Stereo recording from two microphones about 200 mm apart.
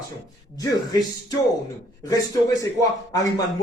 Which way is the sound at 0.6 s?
20° left (ahead or behind).